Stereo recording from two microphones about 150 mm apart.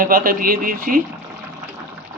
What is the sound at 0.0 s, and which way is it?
Speech, 75° right (ahead or behind).